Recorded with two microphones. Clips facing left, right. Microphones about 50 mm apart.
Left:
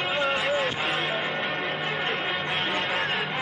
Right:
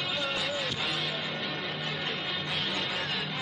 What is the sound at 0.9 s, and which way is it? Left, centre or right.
Music, left.